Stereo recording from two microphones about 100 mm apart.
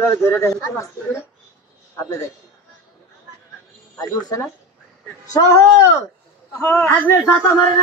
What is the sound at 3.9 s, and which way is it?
Speech, 40° left (ahead or behind).